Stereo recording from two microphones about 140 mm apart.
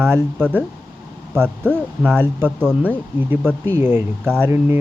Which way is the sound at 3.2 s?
15° right (ahead or behind).